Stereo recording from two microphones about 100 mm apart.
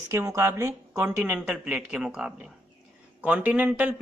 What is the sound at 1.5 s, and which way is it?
Speech, 10° right (ahead or behind).